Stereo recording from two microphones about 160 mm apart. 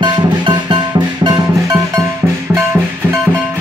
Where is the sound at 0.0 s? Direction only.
25° right (ahead or behind).